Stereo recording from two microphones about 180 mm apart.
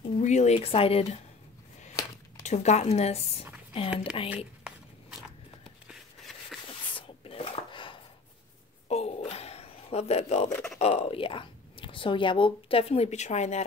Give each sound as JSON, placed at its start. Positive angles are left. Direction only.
{"t": 0.2, "sound": "a woman's voice", "side_deg": 40}
{"t": 2.4, "sound": "a woman's voice", "side_deg": 40}
{"t": 5.9, "sound": "a sound", "side_deg": 0}
{"t": 6.7, "sound": "a sound", "side_deg": 30}
{"t": 10.5, "sound": "speech", "side_deg": 5}
{"t": 10.8, "sound": "a woman's voice", "side_deg": 35}